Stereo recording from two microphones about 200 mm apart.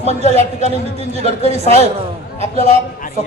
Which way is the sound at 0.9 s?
30° right (ahead or behind).